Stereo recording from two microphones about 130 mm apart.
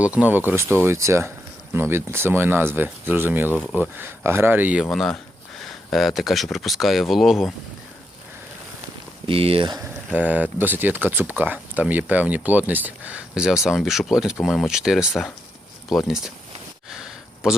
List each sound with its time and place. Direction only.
0.0 s speech: 10° right (ahead or behind)
4.9 s speech: 5° left (ahead or behind)
9.2 s speech: 45° right (ahead or behind)
10.1 s speech: 10° right (ahead or behind)
16.9 s a sound: 5° right (ahead or behind)